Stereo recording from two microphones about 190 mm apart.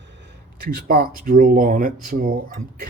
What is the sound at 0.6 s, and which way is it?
Speech, 50° right (ahead or behind).